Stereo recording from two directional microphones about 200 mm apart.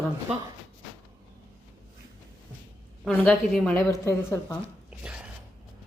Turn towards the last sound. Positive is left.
turn(degrees=-5)  # may be behind; listen again after turning